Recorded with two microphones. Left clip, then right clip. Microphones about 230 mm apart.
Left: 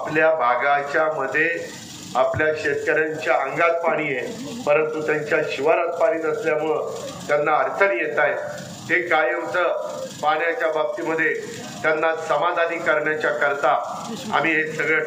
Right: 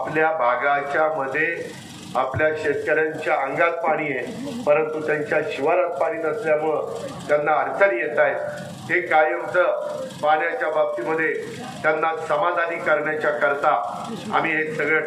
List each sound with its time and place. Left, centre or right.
0.1 s a man's voice: left